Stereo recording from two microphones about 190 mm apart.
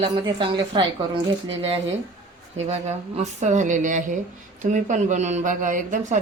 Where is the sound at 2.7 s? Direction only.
35° right (ahead or behind).